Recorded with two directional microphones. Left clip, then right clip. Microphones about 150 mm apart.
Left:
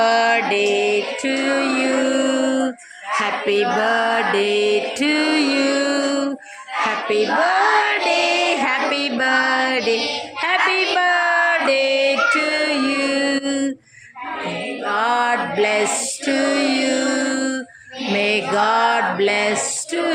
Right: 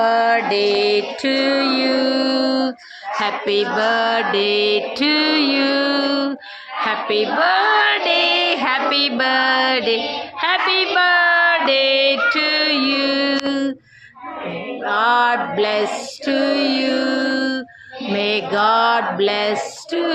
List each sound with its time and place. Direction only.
0.0 s music: centre (ahead or behind)
3.8 s mantra: 5° left (ahead or behind)
7.1 s music: 15° left (ahead or behind)
10.5 s a sound: 55° right (ahead or behind)
10.9 s music: 10° left (ahead or behind)
12.8 s mantra: 10° left (ahead or behind)
14.8 s music: 10° left (ahead or behind)